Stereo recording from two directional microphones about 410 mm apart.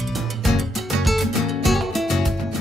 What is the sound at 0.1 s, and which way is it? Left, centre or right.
Music, centre.